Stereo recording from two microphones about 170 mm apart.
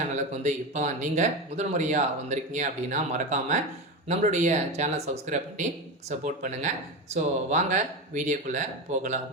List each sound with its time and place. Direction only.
0.4 s speech: 45° right (ahead or behind)